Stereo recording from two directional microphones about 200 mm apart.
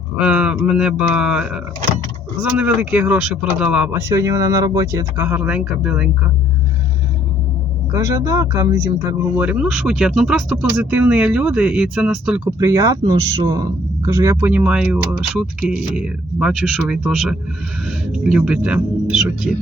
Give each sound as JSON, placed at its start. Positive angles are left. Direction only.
{"t": 0.2, "sound": "speech", "side_deg": -5}
{"t": 4.1, "sound": "speech", "side_deg": -15}
{"t": 7.9, "sound": "speech", "side_deg": -15}
{"t": 12.5, "sound": "speech", "side_deg": -15}